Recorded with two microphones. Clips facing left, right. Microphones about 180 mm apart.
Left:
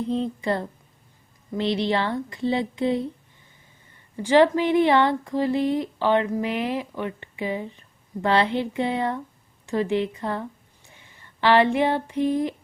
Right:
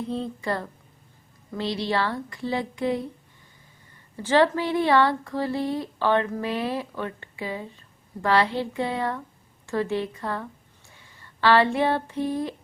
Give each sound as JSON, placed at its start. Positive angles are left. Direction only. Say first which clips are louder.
{"t": 0.1, "sound": "speech", "louder": "left 5 dB", "side_deg": 20}
{"t": 4.2, "sound": "speech", "louder": "left 3 dB", "side_deg": 15}